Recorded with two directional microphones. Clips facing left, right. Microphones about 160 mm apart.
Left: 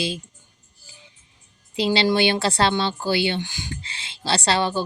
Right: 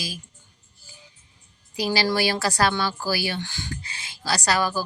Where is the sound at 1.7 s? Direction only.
25° left (ahead or behind).